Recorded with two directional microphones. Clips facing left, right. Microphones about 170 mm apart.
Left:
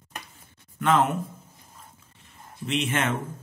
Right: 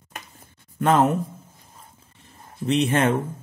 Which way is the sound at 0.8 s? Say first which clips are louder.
Right 4 dB; 40° right (ahead or behind).